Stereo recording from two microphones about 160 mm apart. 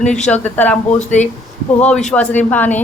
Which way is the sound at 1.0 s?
50° left (ahead or behind).